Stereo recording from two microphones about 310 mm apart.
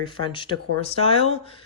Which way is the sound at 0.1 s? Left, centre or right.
Centre.